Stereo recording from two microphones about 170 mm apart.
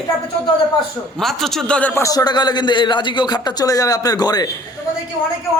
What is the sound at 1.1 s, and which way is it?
A man's voice, centre (ahead or behind).